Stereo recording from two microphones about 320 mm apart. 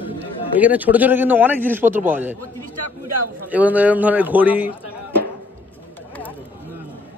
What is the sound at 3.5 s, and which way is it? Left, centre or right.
A man's voice, centre.